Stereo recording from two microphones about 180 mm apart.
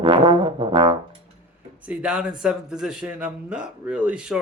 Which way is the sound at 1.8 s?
5° right (ahead or behind).